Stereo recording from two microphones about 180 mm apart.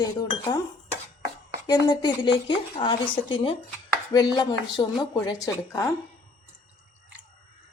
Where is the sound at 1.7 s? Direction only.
20° left (ahead or behind).